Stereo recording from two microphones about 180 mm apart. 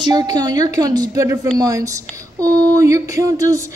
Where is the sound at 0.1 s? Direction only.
20° right (ahead or behind).